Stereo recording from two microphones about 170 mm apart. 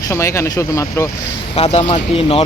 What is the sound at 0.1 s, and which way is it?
Speech, 15° left (ahead or behind).